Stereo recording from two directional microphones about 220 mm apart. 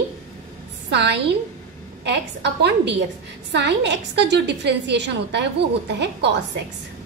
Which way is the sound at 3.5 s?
55° right (ahead or behind).